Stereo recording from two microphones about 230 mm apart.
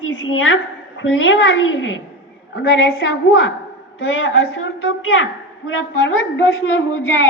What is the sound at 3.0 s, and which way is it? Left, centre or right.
A woman's voice, left.